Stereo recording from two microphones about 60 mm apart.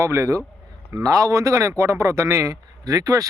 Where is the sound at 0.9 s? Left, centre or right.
Right.